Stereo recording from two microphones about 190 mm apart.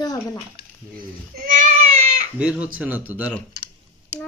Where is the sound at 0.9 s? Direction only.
50° right (ahead or behind).